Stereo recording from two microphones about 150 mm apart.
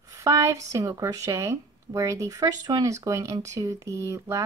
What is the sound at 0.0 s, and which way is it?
Speech, 25° right (ahead or behind).